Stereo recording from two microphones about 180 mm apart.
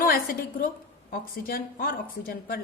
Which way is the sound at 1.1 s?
55° left (ahead or behind).